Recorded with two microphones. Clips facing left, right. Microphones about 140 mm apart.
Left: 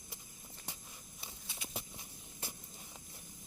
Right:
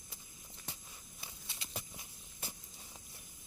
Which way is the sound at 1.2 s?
15° left (ahead or behind).